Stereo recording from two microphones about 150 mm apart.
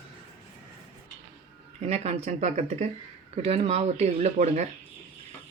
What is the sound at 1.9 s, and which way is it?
Speech, 45° right (ahead or behind).